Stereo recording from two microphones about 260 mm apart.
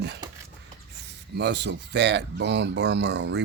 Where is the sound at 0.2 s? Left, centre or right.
Centre.